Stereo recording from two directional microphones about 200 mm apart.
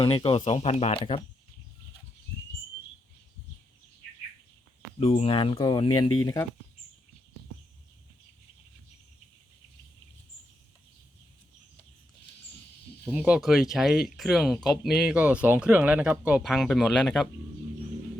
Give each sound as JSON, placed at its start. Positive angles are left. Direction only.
{"t": 0.0, "sound": "speech", "side_deg": 25}
{"t": 4.9, "sound": "speech", "side_deg": 30}
{"t": 13.1, "sound": "speech", "side_deg": -5}